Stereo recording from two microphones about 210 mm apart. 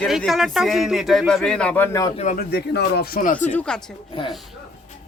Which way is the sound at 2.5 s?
50° left (ahead or behind).